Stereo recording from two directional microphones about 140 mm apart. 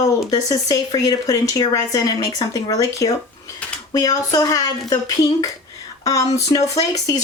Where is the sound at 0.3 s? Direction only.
25° left (ahead or behind).